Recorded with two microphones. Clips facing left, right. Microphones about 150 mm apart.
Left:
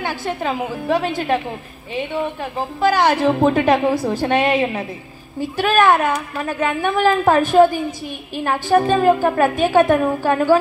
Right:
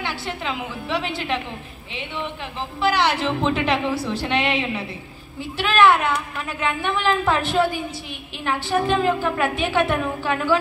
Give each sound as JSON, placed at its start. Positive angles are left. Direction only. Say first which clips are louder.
{"t": 0.0, "sound": "a woman's voice", "louder": "left 5 dB", "side_deg": 45}
{"t": 2.8, "sound": "a woman's voice", "louder": "left 5 dB", "side_deg": 45}